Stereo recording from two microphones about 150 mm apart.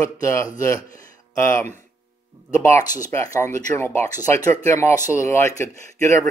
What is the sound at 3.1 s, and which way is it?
Speech, 15° left (ahead or behind).